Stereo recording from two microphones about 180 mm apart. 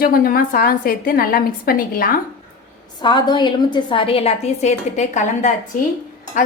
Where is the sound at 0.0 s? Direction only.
50° left (ahead or behind).